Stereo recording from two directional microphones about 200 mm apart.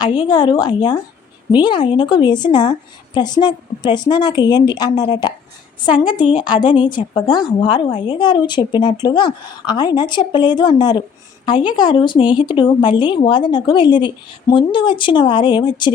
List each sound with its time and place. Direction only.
0.2 s a woman's voice: 25° left (ahead or behind)